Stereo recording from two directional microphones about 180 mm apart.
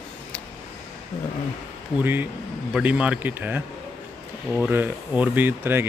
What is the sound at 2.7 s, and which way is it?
Speech, 5° right (ahead or behind).